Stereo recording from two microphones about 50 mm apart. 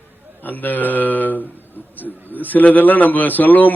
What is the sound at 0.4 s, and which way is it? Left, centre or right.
A man's voice, left.